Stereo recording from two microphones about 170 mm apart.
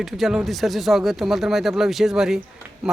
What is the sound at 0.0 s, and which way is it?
Speech, centre (ahead or behind).